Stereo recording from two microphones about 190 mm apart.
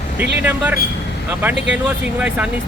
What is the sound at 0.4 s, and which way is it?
Speech, 10° right (ahead or behind).